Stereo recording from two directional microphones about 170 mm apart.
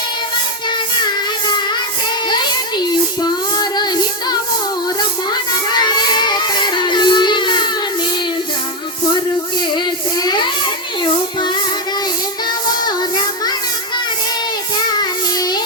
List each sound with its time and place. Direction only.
2.3 s child singing: 25° left (ahead or behind)
10.2 s a sound: 25° left (ahead or behind)
12.8 s child singing: 25° left (ahead or behind)
14.9 s child singing: 25° left (ahead or behind)